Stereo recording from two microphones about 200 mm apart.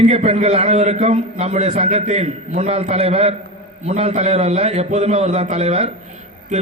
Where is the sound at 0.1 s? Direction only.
35° right (ahead or behind).